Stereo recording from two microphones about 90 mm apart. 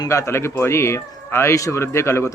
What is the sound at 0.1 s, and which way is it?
A man's voice, 30° left (ahead or behind).